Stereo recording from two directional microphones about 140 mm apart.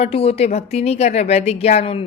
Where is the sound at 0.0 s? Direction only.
45° left (ahead or behind).